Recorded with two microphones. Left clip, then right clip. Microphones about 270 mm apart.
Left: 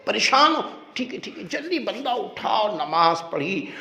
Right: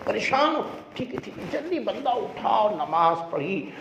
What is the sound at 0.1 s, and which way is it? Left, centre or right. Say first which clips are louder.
Speech: left 5 dB; left.